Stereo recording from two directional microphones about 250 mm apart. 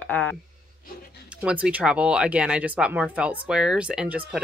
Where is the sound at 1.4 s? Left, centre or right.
Centre.